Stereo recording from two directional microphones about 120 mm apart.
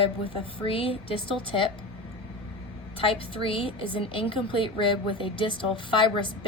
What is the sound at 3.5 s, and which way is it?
A woman's voice, 45° left (ahead or behind).